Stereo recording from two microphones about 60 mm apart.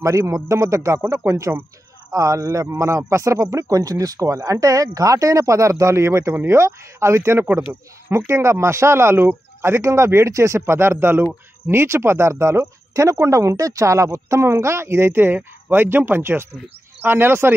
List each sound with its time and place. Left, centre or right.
0.0 s a man's voice: right